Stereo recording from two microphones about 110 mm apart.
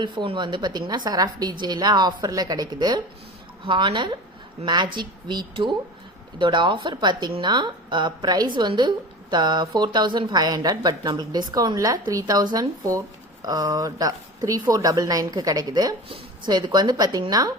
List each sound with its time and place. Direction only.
0.0 s a woman's voice: 45° right (ahead or behind)
16.0 s speech: 55° right (ahead or behind)
16.6 s a woman's voice: 40° right (ahead or behind)